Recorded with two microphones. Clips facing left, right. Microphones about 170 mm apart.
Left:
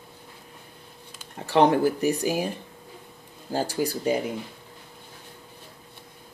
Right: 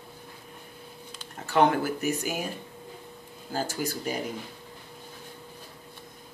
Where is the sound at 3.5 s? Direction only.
35° left (ahead or behind).